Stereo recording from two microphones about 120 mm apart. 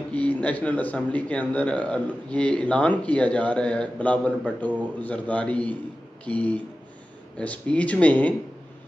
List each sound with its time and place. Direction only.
0.1 s speech: 10° left (ahead or behind)